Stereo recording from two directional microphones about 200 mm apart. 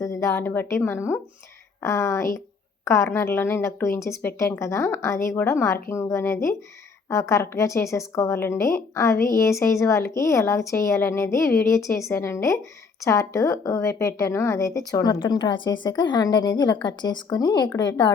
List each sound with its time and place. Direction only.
0.0 s a woman's voice: 15° left (ahead or behind)